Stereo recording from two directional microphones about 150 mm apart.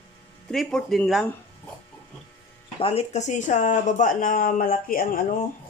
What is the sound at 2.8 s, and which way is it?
Speech, 40° left (ahead or behind).